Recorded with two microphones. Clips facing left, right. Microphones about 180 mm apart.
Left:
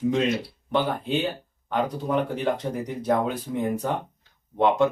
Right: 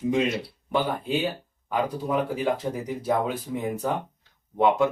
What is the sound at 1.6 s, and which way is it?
Speech, 5° right (ahead or behind).